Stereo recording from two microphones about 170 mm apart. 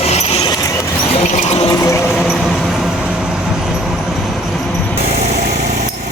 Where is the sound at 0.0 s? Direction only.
40° left (ahead or behind).